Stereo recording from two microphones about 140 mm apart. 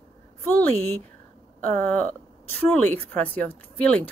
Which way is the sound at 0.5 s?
10° left (ahead or behind).